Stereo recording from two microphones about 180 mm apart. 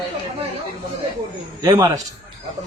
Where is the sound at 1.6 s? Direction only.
20° right (ahead or behind).